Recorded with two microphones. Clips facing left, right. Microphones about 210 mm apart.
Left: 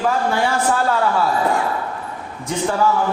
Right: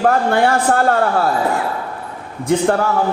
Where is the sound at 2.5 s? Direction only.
60° right (ahead or behind).